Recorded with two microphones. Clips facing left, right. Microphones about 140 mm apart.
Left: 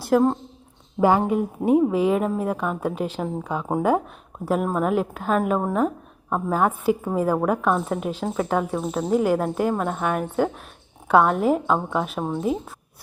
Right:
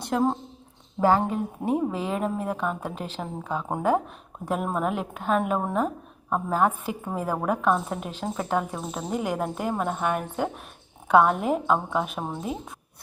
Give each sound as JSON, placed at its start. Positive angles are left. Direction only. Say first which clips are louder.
{"t": 0.0, "sound": "a woman's voice", "louder": "left 5 dB", "side_deg": 0}
{"t": 1.0, "sound": "a woman's voice", "louder": "left 3 dB", "side_deg": 10}